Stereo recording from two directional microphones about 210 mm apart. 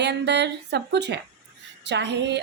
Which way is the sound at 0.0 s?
55° right (ahead or behind).